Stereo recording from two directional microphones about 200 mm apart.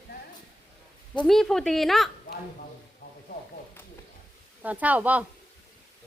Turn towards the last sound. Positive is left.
turn(degrees=-5)  # may be behind; listen again after turning